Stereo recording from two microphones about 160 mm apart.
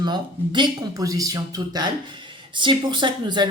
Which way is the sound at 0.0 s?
25° right (ahead or behind).